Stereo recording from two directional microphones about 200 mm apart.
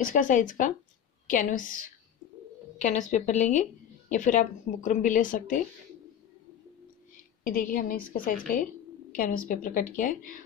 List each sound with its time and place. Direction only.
0.0 s speech: 40° left (ahead or behind)
7.4 s a woman's voice: 45° left (ahead or behind)